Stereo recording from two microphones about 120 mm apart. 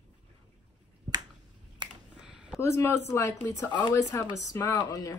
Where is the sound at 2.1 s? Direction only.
5° right (ahead or behind).